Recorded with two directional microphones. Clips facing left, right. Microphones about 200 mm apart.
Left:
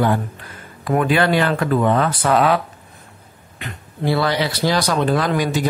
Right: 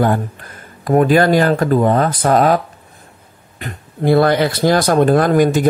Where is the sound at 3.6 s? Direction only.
50° right (ahead or behind).